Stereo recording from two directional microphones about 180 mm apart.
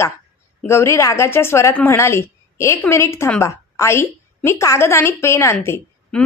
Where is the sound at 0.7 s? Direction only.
15° left (ahead or behind).